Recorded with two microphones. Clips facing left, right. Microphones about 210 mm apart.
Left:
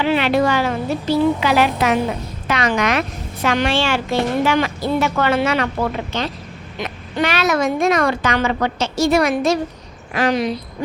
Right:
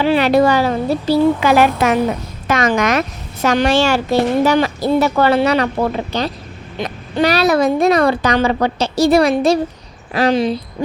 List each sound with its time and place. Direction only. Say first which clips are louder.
0.0 s a woman's voice: right 4 dB; 40° right (ahead or behind)
1.4 s a woman's voice: right 4 dB; 50° right (ahead or behind); by 10.6 s 30° right (ahead or behind)